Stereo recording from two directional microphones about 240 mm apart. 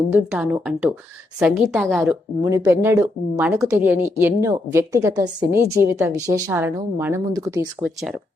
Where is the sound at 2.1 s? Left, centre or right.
Centre.